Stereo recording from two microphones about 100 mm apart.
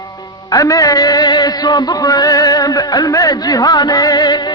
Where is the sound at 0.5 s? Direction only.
35° left (ahead or behind).